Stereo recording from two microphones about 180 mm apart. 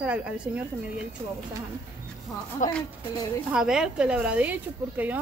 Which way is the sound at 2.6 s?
45° left (ahead or behind).